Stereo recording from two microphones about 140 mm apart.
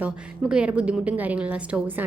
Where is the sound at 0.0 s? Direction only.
10° right (ahead or behind).